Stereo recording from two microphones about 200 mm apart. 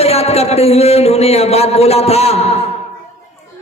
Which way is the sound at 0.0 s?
30° left (ahead or behind).